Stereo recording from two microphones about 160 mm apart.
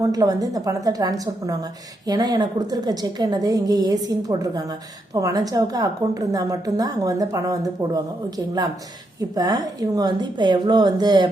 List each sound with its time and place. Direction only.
0.1 s a woman's voice: 25° right (ahead or behind)
9.3 s a woman's voice: 25° right (ahead or behind)